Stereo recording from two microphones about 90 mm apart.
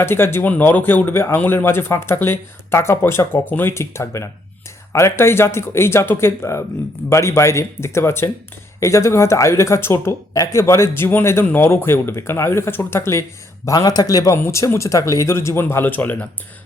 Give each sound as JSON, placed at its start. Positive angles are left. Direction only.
{"t": 0.0, "sound": "speech", "side_deg": 25}
{"t": 13.7, "sound": "a man's voice", "side_deg": 45}
{"t": 14.3, "sound": "speech", "side_deg": 30}